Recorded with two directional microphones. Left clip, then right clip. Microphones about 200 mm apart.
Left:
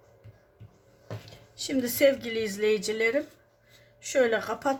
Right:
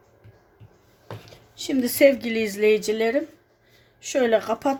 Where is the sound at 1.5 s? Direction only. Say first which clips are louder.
Right 4 dB; 30° right (ahead or behind).